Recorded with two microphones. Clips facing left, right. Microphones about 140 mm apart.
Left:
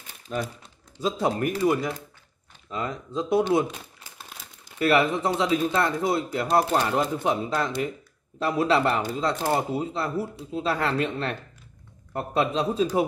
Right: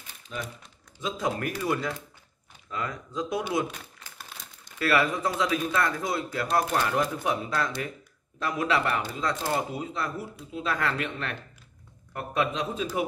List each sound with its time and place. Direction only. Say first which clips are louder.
0.3 s speech: left 7 dB; 45° left (ahead or behind)
1.0 s speech: left 5 dB; 30° left (ahead or behind)
1.6 s speech: left 6 dB; 20° left (ahead or behind)
4.7 s a man's voice: left 4 dB; 20° left (ahead or behind)